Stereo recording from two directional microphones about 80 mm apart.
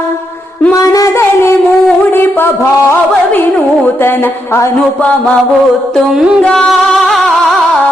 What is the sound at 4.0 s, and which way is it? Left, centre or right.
Music, left.